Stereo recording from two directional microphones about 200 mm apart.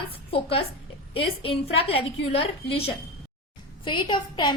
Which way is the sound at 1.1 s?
30° left (ahead or behind).